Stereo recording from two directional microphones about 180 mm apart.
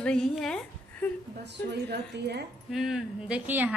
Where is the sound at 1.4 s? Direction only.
70° right (ahead or behind).